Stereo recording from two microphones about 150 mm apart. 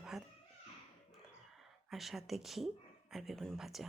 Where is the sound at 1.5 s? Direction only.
Centre (ahead or behind).